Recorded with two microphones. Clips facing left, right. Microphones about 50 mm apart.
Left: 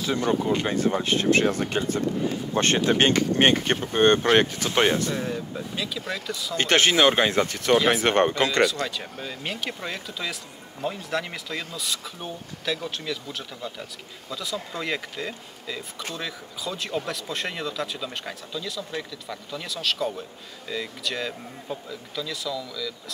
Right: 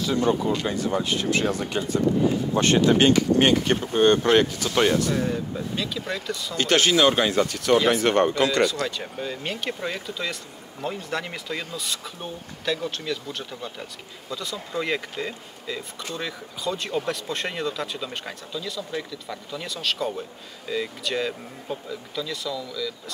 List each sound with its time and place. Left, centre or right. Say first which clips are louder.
0.3 s speech: even; left
5.1 s speech: right 3 dB; centre
6.5 s speech: even; left
8.8 s speech: right 2 dB; centre